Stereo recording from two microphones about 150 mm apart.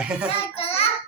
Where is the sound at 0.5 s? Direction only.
40° left (ahead or behind).